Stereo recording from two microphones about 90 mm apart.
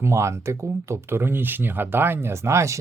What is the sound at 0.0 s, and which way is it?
Speech, 30° right (ahead or behind).